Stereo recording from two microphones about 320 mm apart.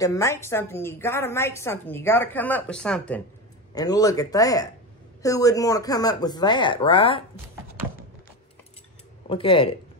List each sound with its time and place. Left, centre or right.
0.0 s a woman's voice: centre
9.3 s a woman's voice: centre